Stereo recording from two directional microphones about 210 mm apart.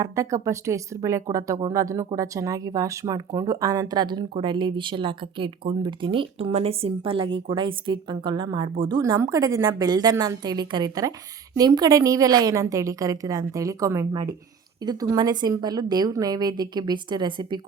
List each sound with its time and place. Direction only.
0.0 s a woman's voice: 15° right (ahead or behind)